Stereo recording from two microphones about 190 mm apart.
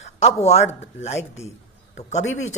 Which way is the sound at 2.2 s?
90° left.